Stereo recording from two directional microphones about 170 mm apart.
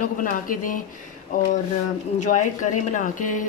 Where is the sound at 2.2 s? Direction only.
45° left (ahead or behind).